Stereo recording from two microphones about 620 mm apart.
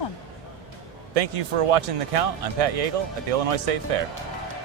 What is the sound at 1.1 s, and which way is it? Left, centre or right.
Speech, right.